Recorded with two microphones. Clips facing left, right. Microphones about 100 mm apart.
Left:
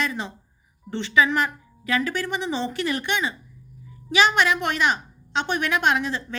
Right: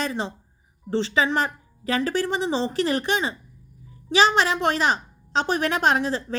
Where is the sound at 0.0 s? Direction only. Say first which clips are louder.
Right 1 dB; 30° right (ahead or behind).